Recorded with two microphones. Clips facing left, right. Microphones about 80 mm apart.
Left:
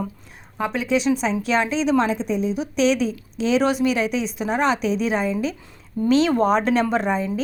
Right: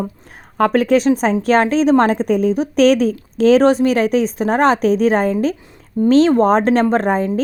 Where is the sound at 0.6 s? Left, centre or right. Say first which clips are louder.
Right 9 dB; right.